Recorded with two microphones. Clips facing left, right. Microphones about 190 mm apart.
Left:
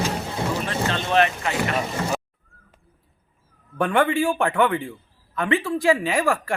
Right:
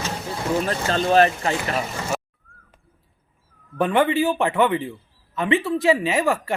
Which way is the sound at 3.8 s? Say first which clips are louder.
Right 1 dB; centre (ahead or behind).